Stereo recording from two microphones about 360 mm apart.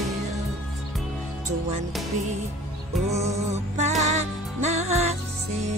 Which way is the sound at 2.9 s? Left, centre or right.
Centre.